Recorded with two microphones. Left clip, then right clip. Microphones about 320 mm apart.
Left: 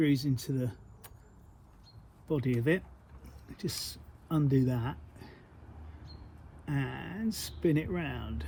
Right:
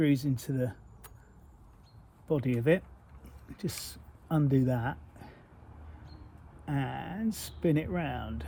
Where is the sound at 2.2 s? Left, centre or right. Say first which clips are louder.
Right 2 dB; centre.